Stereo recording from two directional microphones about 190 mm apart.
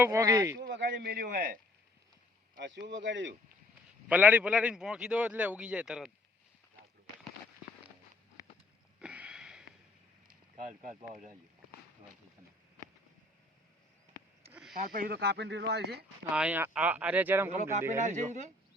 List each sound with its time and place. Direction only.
0.0 s a man's voice: 15° right (ahead or behind)
0.5 s a man's voice: 65° right (ahead or behind); by 1.5 s 45° right (ahead or behind)
2.6 s speech: 65° right (ahead or behind)
4.1 s a man's voice: 10° right (ahead or behind)
9.0 s a sound: 5° right (ahead or behind)
10.2 s boat: 45° right (ahead or behind)
11.1 s a man's voice: 45° right (ahead or behind)
14.8 s speech: 50° right (ahead or behind)
16.3 s a man's voice: 5° right (ahead or behind)
17.5 s speech: 40° right (ahead or behind)